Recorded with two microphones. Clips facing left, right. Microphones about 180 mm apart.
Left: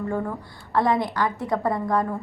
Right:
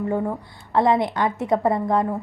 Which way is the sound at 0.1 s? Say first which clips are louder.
Right 3 dB; 20° right (ahead or behind).